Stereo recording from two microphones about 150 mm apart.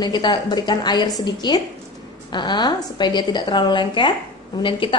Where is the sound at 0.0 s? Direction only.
30° left (ahead or behind).